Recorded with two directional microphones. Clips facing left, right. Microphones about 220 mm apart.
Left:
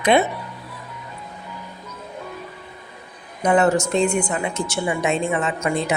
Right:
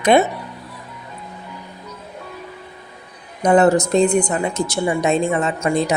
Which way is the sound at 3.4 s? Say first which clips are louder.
Right 4 dB; 35° right (ahead or behind).